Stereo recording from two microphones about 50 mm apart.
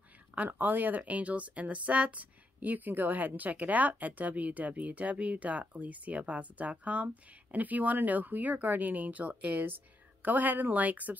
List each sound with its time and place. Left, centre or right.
0.5 s speech: right